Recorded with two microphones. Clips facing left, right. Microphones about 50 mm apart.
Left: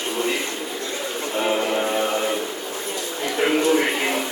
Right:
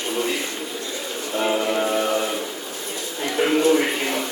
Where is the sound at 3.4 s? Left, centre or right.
Centre.